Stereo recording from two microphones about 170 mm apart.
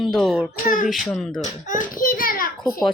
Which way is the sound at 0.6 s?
50° left (ahead or behind).